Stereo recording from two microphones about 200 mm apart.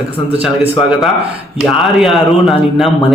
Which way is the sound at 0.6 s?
5° right (ahead or behind).